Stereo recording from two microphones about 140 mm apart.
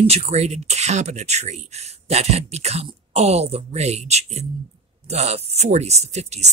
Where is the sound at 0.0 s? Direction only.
50° right (ahead or behind).